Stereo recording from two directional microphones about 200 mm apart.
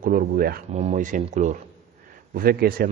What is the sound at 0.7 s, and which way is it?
A man's voice, 35° right (ahead or behind).